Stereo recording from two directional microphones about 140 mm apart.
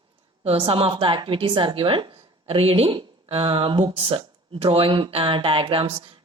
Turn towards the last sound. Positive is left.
turn(degrees=-40)  # may be behind; listen again after turning